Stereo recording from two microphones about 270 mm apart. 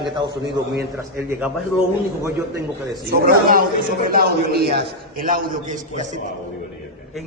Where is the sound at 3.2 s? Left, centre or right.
Right.